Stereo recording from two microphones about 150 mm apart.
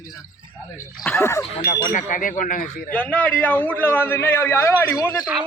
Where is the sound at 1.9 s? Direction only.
60° left (ahead or behind).